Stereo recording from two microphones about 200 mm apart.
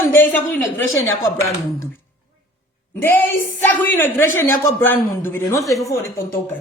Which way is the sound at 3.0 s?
10° left (ahead or behind).